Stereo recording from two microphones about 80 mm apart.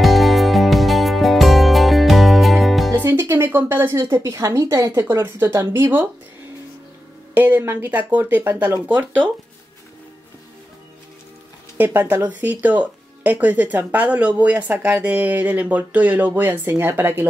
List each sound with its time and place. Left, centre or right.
0.0 s music: centre
2.9 s music: right
3.3 s a woman's voice: right
7.3 s speech: right
11.8 s speech: right